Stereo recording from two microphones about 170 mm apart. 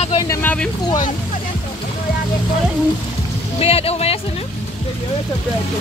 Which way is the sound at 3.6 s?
35° left (ahead or behind).